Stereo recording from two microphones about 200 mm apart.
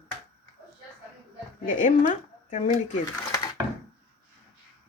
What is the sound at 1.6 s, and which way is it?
Speech, 40° left (ahead or behind).